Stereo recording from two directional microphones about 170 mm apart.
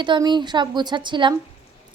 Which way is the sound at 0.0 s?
25° right (ahead or behind).